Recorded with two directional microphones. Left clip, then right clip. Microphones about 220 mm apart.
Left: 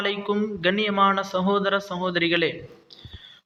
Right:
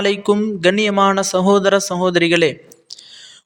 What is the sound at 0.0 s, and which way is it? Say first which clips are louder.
A man's voice: right 9 dB; 65° right (ahead or behind).